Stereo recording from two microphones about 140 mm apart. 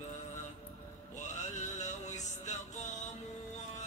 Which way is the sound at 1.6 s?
60° left (ahead or behind).